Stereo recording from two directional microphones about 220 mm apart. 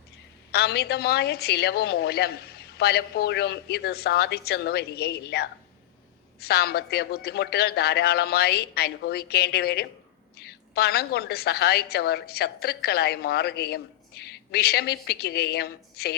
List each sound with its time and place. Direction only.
0.5 s a woman's voice: 45° left (ahead or behind)